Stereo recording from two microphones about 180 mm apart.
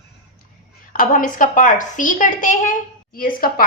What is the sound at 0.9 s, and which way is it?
A woman's voice, 50° left (ahead or behind).